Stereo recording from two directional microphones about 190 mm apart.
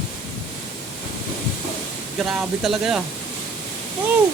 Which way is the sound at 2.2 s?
Centre (ahead or behind).